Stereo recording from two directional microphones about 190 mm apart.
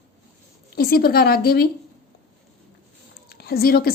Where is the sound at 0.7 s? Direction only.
55° left (ahead or behind).